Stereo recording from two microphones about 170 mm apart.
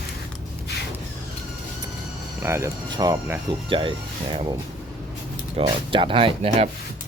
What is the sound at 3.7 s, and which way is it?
Speech, 30° right (ahead or behind).